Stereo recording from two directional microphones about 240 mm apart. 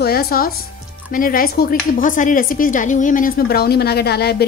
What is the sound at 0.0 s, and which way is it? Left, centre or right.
Speech, left.